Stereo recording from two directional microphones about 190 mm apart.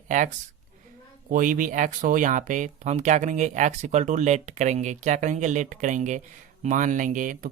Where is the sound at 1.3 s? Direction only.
45° right (ahead or behind).